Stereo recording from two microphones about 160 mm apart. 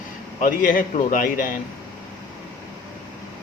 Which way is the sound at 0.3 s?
60° left (ahead or behind).